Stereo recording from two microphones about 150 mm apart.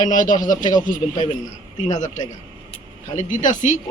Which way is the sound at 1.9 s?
55° left (ahead or behind).